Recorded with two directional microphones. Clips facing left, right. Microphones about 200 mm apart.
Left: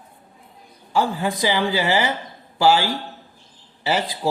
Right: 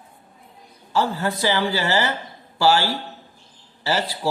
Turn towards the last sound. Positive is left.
turn(degrees=15)  # may be behind; listen again after turning